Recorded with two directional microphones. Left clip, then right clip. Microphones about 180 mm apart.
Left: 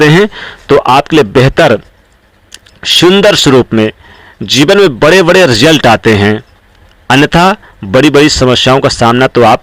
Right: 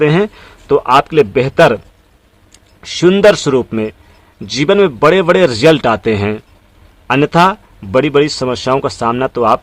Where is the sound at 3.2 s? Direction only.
25° left (ahead or behind).